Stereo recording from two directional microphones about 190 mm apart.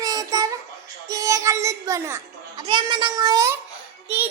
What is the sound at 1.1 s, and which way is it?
A child's voice, 15° right (ahead or behind).